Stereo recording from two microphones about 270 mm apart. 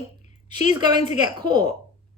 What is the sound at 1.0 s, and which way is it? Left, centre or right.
Speech, centre.